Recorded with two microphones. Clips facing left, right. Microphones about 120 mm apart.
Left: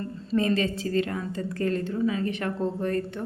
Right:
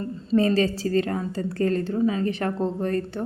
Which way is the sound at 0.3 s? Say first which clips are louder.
Right 4 dB; 35° right (ahead or behind).